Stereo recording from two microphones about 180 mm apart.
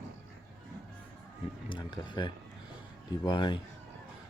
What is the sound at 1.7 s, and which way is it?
Speech, 25° left (ahead or behind).